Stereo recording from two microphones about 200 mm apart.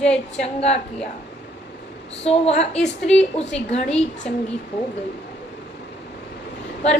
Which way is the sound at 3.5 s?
30° left (ahead or behind).